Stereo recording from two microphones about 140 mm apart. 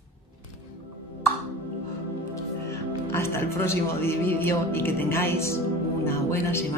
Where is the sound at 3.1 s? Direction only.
20° left (ahead or behind).